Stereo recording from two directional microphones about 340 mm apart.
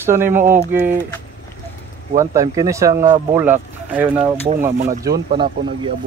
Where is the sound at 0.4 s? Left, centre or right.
Right.